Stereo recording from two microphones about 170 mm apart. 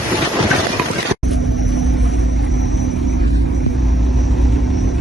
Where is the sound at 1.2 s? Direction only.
Centre (ahead or behind).